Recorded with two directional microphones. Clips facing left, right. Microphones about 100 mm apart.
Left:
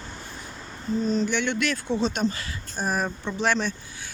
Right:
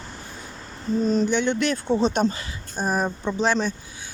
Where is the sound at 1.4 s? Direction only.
30° right (ahead or behind).